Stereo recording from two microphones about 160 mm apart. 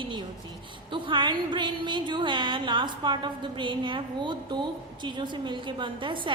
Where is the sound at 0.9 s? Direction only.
30° right (ahead or behind).